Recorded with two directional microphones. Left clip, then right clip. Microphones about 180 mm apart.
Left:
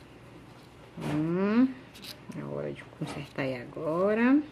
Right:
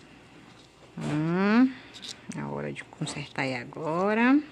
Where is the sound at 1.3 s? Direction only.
70° right (ahead or behind).